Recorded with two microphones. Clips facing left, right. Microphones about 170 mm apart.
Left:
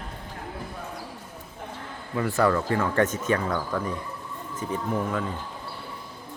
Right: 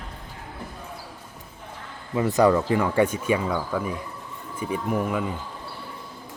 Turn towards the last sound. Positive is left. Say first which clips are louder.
# right 2 dB
turn(degrees=-10)  # may be behind; listen again after turning